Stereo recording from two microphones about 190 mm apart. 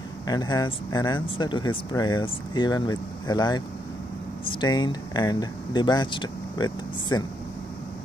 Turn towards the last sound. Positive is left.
turn(degrees=20)  # may be behind; listen again after turning